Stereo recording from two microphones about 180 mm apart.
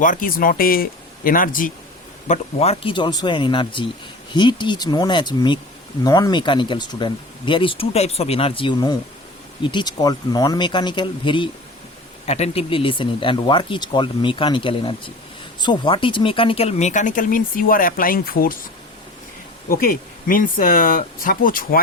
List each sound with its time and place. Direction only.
0.0 s speech: 50° left (ahead or behind)
2.2 s speech: 40° left (ahead or behind); by 18.5 s 55° left (ahead or behind)
19.6 s speech: 50° left (ahead or behind)